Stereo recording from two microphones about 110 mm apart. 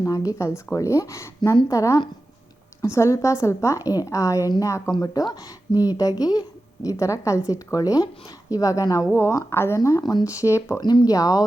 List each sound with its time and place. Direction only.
0.0 s a woman's voice: 30° left (ahead or behind)
10.0 s speech: 40° left (ahead or behind)
10.8 s speech: 40° left (ahead or behind)